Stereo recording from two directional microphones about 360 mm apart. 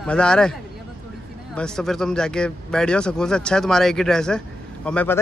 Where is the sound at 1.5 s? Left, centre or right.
Centre.